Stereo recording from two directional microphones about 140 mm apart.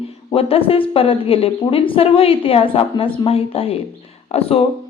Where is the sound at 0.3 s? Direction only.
45° left (ahead or behind).